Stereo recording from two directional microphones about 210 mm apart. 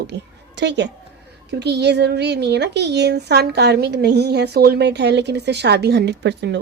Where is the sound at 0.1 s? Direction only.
55° right (ahead or behind).